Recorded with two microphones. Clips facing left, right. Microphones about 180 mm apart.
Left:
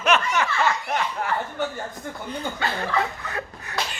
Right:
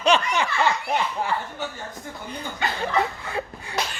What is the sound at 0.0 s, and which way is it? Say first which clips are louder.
Snicker: right 1 dB; 30° right (ahead or behind).